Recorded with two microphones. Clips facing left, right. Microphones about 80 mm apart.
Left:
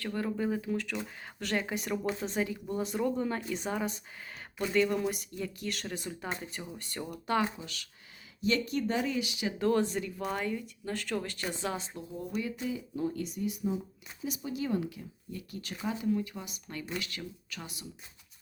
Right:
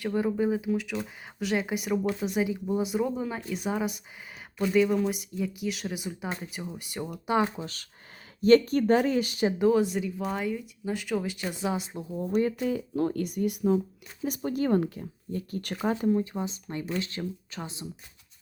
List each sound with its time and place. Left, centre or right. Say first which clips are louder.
0.0 s speech: right 6 dB; centre
7.5 s speech: right 6 dB; right
9.6 s speech: right 3 dB; centre
11.9 s speech: right 6 dB; right
12.3 s speech: right 10 dB; right
12.5 s speech: right 7 dB; right
14.3 s speech: right 7 dB; right
16.0 s speech: right 6 dB; right